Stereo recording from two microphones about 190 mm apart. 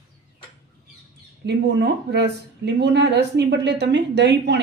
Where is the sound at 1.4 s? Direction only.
60° right (ahead or behind).